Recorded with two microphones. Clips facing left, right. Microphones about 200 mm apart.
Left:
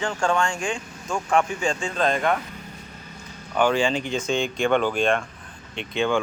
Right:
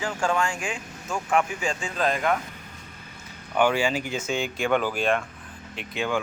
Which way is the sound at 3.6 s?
10° right (ahead or behind).